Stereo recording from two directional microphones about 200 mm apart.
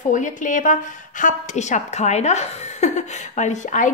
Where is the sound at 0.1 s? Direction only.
40° left (ahead or behind).